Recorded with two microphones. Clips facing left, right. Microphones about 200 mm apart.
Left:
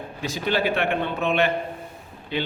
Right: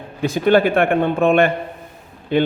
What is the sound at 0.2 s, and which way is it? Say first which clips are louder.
A man's voice: right 10 dB; 55° right (ahead or behind).